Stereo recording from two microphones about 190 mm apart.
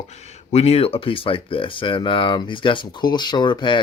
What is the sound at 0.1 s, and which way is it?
Speech, 35° left (ahead or behind).